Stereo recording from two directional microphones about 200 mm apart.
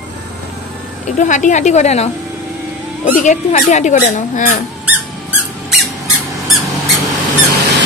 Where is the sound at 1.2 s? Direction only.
40° left (ahead or behind).